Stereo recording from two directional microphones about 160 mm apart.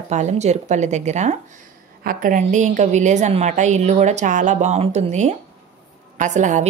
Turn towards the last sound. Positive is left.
turn(degrees=-50)  # may be behind; listen again after turning